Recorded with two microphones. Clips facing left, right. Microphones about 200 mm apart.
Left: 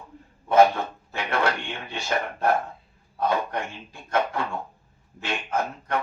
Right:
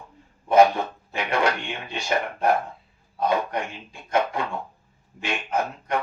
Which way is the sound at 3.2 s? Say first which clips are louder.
Right 1 dB; 15° right (ahead or behind).